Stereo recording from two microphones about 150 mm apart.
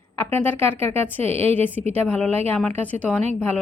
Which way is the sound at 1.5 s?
10° left (ahead or behind).